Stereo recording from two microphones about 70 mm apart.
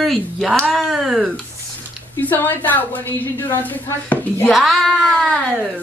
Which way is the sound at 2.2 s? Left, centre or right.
Left.